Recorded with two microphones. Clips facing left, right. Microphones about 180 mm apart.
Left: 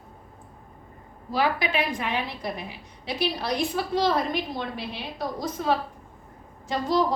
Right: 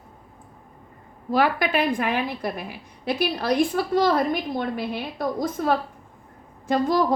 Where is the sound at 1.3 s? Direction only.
55° right (ahead or behind).